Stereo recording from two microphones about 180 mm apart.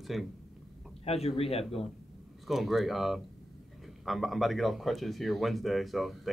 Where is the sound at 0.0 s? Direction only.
Centre (ahead or behind).